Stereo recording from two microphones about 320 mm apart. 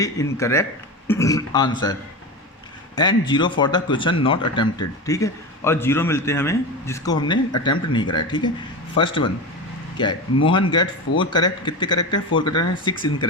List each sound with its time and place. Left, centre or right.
0.0 s speech: centre